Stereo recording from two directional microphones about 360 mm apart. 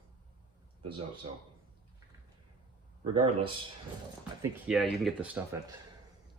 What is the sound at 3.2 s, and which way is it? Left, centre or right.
Speech, centre.